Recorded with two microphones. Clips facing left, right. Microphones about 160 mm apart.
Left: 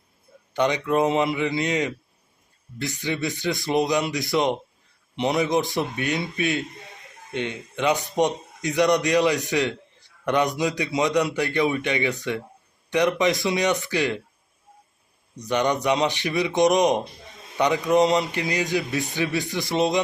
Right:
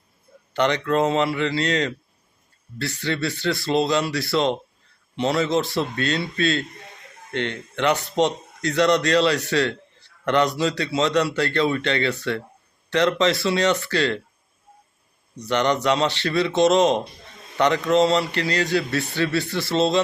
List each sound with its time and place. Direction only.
0.5 s a man's voice: 15° left (ahead or behind)
15.4 s a man's voice: 15° left (ahead or behind)